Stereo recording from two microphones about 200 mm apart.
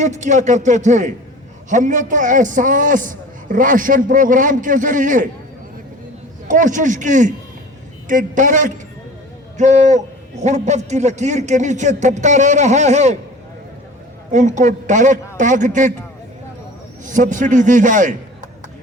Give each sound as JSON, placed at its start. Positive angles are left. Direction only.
{"t": 0.0, "sound": "a man's voice", "side_deg": -35}
{"t": 6.5, "sound": "a man's voice", "side_deg": -40}
{"t": 14.3, "sound": "a man's voice", "side_deg": -35}
{"t": 17.1, "sound": "a man's voice", "side_deg": -40}